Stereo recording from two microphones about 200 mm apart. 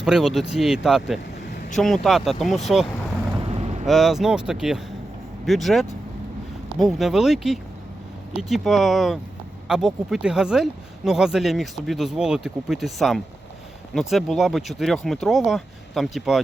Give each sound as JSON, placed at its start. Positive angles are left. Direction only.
{"t": 0.0, "sound": "speech", "side_deg": 0}
{"t": 3.3, "sound": "vehicle", "side_deg": -30}
{"t": 3.8, "sound": "speech", "side_deg": 0}